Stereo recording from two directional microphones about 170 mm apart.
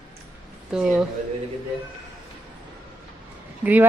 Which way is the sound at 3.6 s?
10° right (ahead or behind).